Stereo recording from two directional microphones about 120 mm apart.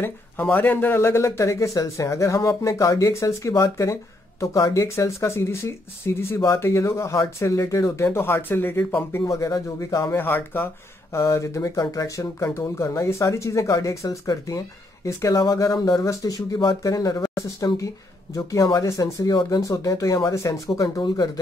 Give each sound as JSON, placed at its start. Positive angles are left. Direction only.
{"t": 0.0, "sound": "speech", "side_deg": 20}